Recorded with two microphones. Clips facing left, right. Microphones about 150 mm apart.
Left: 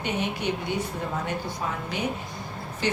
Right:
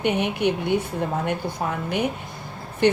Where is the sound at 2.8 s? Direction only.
55° right (ahead or behind).